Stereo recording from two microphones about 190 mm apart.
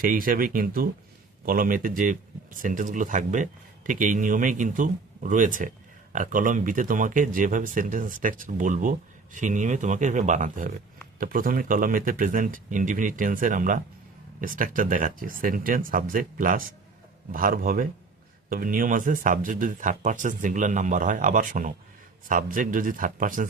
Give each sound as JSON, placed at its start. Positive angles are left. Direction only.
{"t": 0.0, "sound": "speech", "side_deg": -50}